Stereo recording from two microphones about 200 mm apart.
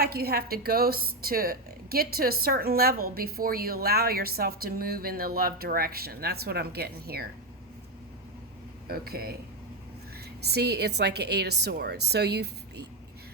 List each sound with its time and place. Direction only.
0.0 s a woman's voice: 50° right (ahead or behind)
8.9 s a woman's voice: 50° right (ahead or behind)
10.4 s a woman's voice: 55° right (ahead or behind)